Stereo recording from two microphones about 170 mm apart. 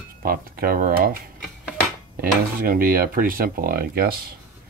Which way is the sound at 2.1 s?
60° right (ahead or behind).